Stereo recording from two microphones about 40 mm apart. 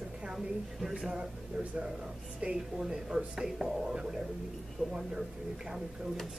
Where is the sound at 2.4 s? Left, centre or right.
Right.